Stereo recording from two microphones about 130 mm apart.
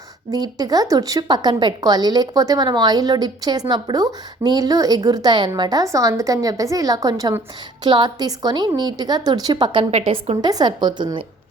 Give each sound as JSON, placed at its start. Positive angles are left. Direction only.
{"t": 0.3, "sound": "a woman's voice", "side_deg": -30}